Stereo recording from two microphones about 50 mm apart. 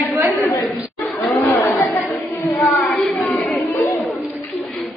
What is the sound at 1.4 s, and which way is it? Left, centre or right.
Chatter, left.